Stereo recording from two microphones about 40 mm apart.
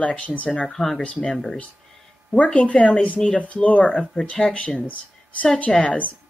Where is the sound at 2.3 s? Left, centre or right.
Left.